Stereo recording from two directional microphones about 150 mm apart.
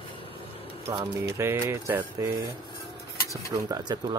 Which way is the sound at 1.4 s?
15° right (ahead or behind).